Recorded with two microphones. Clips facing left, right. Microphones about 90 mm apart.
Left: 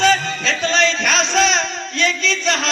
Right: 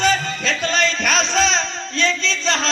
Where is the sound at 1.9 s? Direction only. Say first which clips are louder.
Left 1 dB; 30° right (ahead or behind).